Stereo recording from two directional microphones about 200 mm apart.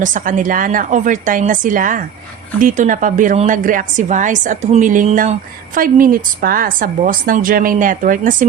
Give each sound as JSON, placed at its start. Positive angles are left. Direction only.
{"t": 0.0, "sound": "a woman's voice", "side_deg": -40}